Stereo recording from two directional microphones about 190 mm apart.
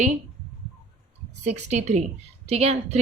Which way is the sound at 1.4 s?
35° right (ahead or behind).